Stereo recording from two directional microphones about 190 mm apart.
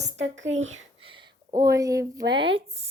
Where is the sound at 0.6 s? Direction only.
90° right.